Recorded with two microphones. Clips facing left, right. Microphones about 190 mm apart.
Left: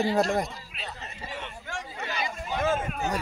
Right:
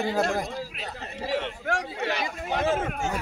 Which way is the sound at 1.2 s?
80° right.